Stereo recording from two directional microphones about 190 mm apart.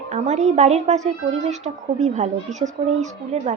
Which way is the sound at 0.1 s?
35° right (ahead or behind).